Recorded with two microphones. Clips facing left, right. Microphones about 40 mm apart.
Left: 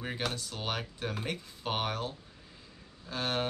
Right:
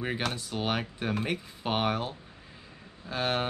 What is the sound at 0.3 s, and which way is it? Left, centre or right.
Speech, centre.